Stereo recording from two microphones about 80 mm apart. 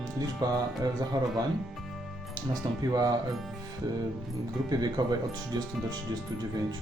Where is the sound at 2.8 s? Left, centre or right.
Right.